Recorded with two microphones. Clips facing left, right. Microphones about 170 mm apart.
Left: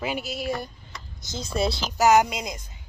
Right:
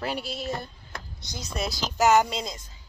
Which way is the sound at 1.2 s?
25° left (ahead or behind).